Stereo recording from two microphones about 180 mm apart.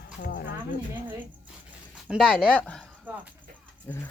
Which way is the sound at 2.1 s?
Centre (ahead or behind).